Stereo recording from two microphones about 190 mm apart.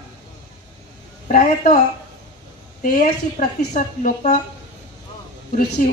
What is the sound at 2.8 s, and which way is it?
A woman's voice, 45° left (ahead or behind).